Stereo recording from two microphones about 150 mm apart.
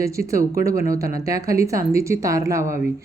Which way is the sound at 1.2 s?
20° right (ahead or behind).